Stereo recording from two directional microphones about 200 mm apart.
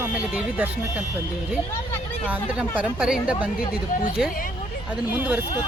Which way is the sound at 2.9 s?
5° right (ahead or behind).